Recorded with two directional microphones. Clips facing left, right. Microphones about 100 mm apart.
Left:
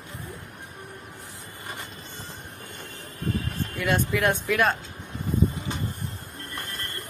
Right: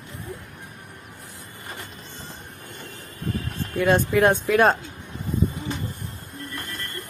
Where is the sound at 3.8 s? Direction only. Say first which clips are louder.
Right 6 dB; 30° right (ahead or behind).